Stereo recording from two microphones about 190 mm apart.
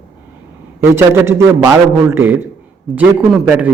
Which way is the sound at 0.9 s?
15° right (ahead or behind).